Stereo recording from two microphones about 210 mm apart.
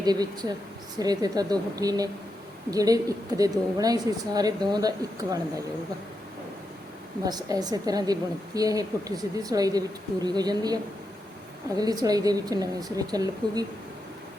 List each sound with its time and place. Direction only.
0.0 s a woman's voice: 20° right (ahead or behind)
7.3 s a woman's voice: 20° right (ahead or behind)
11.8 s a woman's voice: 15° right (ahead or behind)